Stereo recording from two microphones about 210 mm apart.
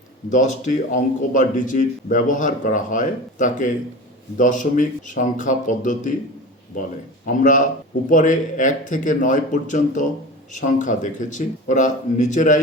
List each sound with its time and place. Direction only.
0.3 s a man's voice: 35° left (ahead or behind)
7.3 s a man's voice: 40° left (ahead or behind)